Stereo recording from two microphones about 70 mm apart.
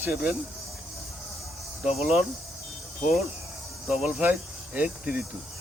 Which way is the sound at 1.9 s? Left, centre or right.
Centre.